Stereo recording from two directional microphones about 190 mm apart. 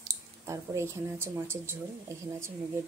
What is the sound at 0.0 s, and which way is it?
Speech, 15° right (ahead or behind).